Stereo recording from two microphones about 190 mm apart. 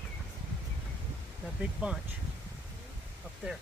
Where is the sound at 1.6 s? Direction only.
5° right (ahead or behind).